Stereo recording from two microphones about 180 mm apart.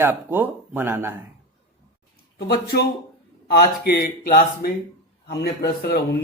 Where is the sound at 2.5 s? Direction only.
60° left (ahead or behind).